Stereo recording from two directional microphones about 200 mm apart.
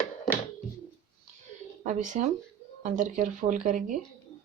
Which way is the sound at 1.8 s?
40° right (ahead or behind).